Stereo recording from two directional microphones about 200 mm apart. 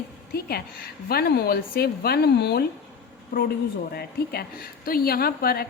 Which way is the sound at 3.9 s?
50° left (ahead or behind).